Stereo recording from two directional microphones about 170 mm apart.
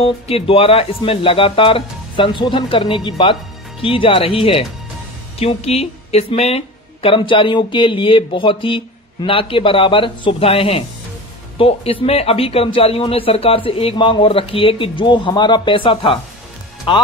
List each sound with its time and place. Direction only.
0.0 s speech: 35° left (ahead or behind)